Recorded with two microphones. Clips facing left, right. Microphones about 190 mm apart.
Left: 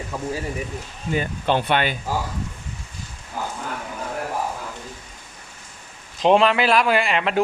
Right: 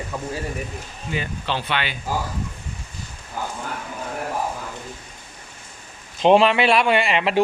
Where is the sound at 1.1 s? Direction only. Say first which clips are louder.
Left 5 dB; 50° left (ahead or behind).